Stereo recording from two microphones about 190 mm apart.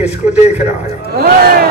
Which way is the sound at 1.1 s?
55° right (ahead or behind).